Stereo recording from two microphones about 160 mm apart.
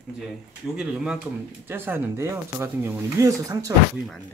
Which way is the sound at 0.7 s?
5° right (ahead or behind).